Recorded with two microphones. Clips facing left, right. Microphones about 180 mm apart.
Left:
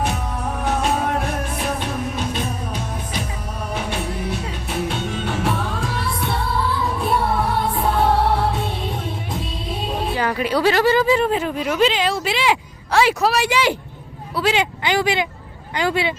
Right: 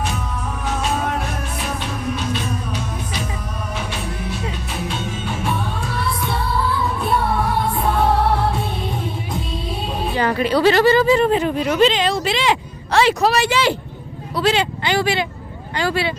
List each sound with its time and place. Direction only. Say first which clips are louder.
0.6 s music: left 2 dB; 60° left (ahead or behind)
4.9 s music: left 2 dB; 70° left (ahead or behind); by 5.9 s 85° left
10.2 s speech: right 4 dB; 10° left (ahead or behind)